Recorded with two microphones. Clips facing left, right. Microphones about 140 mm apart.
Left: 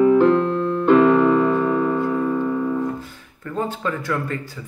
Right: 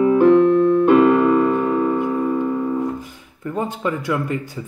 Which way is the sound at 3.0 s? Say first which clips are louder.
Right 3 dB; 15° right (ahead or behind).